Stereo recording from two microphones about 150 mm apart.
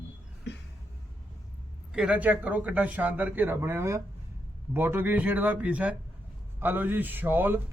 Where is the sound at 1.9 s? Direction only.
5° right (ahead or behind).